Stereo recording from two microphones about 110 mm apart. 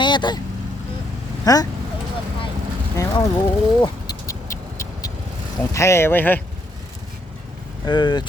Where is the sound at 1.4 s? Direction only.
35° left (ahead or behind).